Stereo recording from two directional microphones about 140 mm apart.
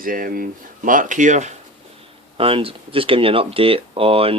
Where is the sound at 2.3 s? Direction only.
40° right (ahead or behind).